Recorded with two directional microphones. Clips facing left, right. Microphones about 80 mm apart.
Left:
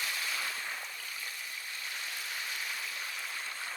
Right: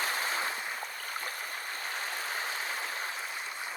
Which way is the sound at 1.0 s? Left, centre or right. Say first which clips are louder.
Right 6 dB; right.